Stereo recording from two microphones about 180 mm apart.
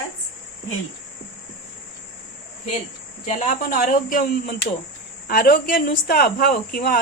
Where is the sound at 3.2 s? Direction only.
40° left (ahead or behind).